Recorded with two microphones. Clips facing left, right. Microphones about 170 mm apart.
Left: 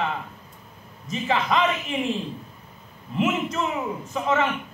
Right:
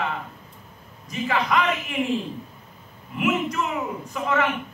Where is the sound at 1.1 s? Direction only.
25° left (ahead or behind).